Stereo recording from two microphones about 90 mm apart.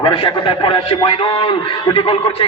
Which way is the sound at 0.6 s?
85° left.